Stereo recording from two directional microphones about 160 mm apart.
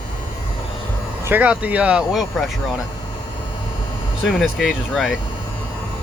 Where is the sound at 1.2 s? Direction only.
10° right (ahead or behind).